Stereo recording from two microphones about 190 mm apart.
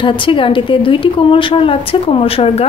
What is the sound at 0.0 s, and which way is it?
A woman's voice, 25° left (ahead or behind).